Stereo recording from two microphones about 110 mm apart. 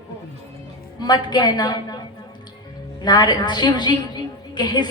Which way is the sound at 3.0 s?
40° left (ahead or behind).